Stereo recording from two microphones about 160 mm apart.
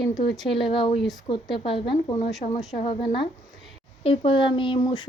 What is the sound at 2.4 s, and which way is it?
Speech, 45° left (ahead or behind).